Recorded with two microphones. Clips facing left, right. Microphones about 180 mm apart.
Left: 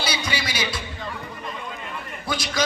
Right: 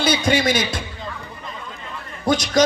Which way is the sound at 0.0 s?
50° right (ahead or behind).